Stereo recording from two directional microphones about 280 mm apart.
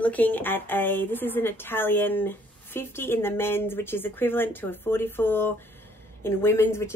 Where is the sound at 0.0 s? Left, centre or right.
Centre.